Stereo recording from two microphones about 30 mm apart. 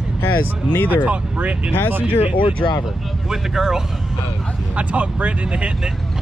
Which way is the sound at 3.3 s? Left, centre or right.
Centre.